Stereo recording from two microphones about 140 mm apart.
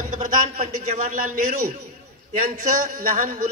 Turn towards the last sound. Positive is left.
turn(degrees=-70)  # may be behind; listen again after turning